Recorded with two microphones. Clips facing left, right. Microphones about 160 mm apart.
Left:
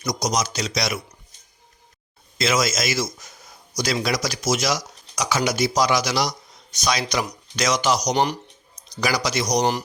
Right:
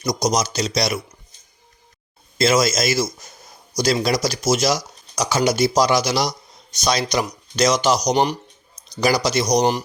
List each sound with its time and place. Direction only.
0.0 s speech: 30° right (ahead or behind)
2.4 s a man's voice: 30° right (ahead or behind)
8.1 s speech: 15° right (ahead or behind)
9.0 s speech: 30° right (ahead or behind)